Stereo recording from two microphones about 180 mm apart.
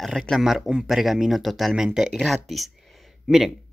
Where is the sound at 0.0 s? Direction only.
Centre (ahead or behind).